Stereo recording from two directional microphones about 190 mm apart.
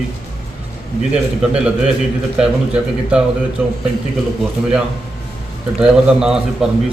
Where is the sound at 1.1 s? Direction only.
5° right (ahead or behind).